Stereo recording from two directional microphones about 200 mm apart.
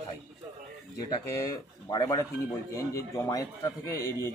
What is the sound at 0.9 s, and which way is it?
Speech, 20° left (ahead or behind).